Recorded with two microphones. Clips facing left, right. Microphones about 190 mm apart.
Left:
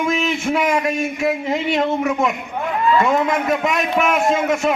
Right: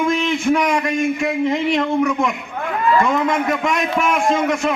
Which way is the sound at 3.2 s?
5° left (ahead or behind).